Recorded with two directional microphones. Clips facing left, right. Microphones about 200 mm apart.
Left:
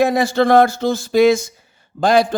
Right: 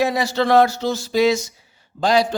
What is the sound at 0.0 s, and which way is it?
Speech, 50° left (ahead or behind).